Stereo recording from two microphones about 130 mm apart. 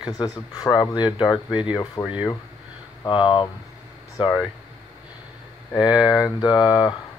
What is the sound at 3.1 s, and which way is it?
Speech, 40° left (ahead or behind).